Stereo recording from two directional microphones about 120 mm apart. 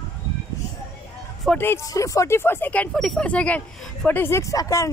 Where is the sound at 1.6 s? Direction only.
20° left (ahead or behind).